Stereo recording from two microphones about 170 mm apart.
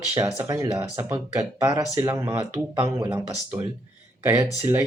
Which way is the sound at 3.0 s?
30° right (ahead or behind).